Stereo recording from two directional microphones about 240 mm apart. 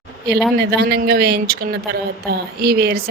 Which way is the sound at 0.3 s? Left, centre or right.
Right.